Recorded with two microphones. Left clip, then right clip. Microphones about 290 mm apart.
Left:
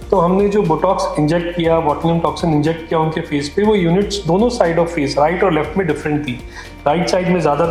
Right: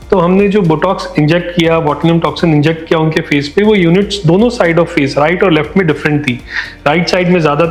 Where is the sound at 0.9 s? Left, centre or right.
Right.